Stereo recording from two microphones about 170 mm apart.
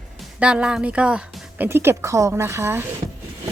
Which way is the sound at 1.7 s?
15° right (ahead or behind).